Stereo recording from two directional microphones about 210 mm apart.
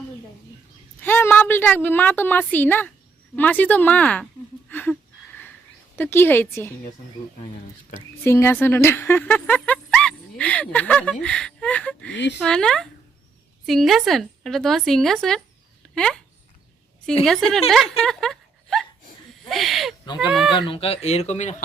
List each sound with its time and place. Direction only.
1.0 s a woman's voice: 10° left (ahead or behind)
4.7 s a sound: 10° left (ahead or behind)
6.0 s a woman's voice: 10° left (ahead or behind)
7.9 s speech: 10° left (ahead or behind)
12.1 s speech: 55° left (ahead or behind)
12.4 s speech: 5° left (ahead or behind)
17.2 s speech: centre (ahead or behind)
20.6 s speech: 25° left (ahead or behind)